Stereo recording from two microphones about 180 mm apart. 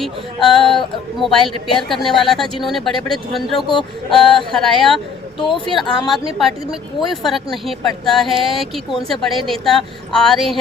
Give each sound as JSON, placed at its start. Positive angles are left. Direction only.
{"t": 0.0, "sound": "speech", "side_deg": 0}
{"t": 5.4, "sound": "speech", "side_deg": 25}
{"t": 6.4, "sound": "speech", "side_deg": 0}